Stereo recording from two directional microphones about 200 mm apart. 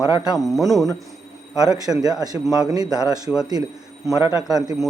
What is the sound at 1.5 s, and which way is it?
A man's voice, 20° right (ahead or behind).